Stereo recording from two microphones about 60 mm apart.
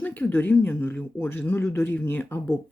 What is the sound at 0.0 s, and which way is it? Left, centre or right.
Speech, left.